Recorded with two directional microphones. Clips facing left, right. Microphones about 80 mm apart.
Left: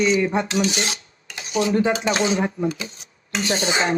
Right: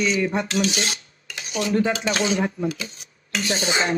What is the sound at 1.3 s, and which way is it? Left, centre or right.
Dishes, left.